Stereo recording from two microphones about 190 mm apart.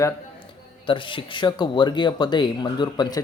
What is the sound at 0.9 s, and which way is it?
Speech, 25° left (ahead or behind).